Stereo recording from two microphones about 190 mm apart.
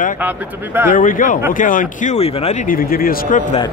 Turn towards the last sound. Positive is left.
turn(degrees=50)  # may be behind; listen again after turning